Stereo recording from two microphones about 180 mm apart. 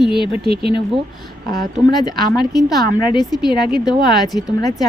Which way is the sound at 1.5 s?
20° left (ahead or behind).